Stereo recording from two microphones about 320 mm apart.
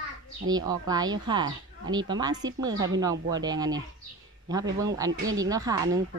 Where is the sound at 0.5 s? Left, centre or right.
Centre.